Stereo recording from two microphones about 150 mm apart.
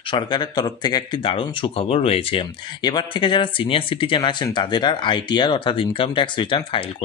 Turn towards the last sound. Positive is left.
turn(degrees=35)  # may be behind; listen again after turning